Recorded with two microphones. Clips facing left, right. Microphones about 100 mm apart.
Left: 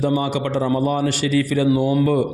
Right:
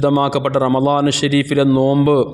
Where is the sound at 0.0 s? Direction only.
85° right.